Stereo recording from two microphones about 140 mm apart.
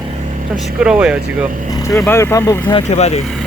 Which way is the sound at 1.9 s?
20° left (ahead or behind).